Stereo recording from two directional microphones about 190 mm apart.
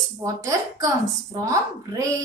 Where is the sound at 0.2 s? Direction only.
20° right (ahead or behind).